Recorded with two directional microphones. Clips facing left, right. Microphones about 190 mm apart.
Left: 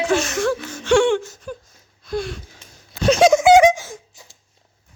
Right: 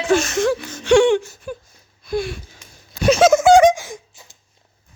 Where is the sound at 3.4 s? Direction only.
10° left (ahead or behind).